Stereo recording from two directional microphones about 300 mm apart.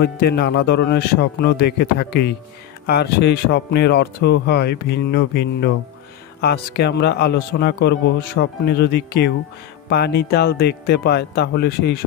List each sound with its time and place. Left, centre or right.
0.0 s a man's voice: left
9.8 s music: left
10.3 s a man's voice: left